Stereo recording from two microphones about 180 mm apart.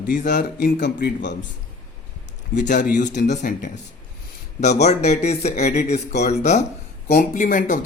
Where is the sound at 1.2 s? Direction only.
80° left.